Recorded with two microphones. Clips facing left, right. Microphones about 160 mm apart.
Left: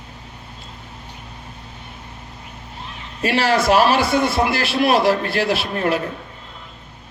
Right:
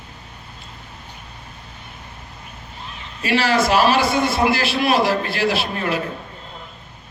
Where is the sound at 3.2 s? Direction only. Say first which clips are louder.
Left 1 dB; 55° left (ahead or behind).